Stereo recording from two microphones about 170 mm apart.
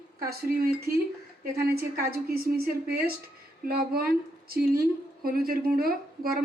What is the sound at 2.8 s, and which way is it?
A woman's voice, 65° right (ahead or behind).